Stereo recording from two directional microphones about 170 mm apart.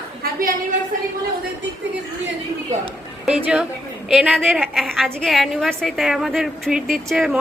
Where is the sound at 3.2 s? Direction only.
5° right (ahead or behind).